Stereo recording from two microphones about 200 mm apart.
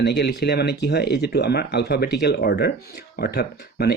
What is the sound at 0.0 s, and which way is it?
Speech, 55° left (ahead or behind).